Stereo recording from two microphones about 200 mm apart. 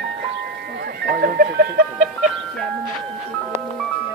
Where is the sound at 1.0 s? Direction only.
50° right (ahead or behind).